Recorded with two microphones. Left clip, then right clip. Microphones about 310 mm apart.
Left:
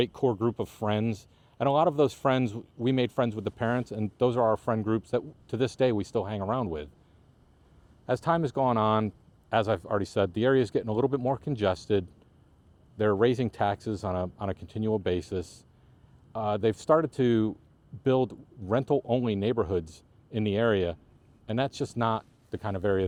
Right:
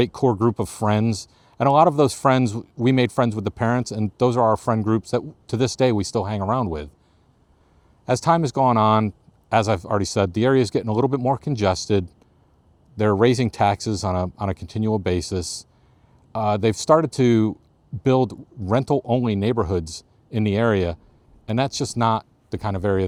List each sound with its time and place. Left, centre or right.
0.0 s speech: right
8.0 s speech: right